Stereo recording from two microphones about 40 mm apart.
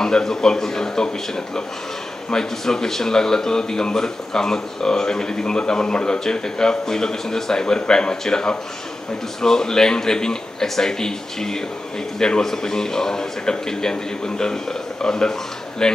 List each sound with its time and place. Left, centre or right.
0.0 s a man's voice: centre